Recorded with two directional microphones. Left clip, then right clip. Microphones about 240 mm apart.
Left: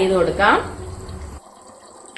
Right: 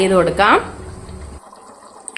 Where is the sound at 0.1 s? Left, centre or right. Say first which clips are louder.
Right 3 dB; right.